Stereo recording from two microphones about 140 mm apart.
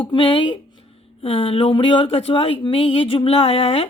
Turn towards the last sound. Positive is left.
turn(degrees=45)  # may be behind; listen again after turning